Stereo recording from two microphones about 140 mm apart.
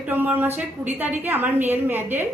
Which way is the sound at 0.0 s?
15° right (ahead or behind).